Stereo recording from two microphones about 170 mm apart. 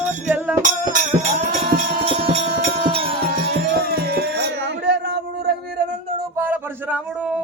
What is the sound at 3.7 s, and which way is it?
Music, 70° right (ahead or behind).